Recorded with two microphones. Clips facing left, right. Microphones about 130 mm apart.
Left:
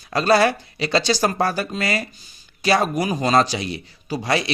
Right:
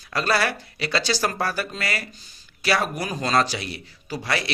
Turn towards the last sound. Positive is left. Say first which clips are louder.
# left 5 dB
turn(degrees=20)  # may be behind; listen again after turning